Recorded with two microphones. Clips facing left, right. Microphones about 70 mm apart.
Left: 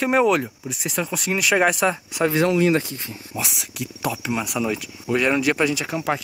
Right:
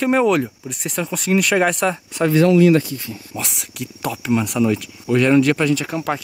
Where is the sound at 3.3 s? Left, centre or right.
Centre.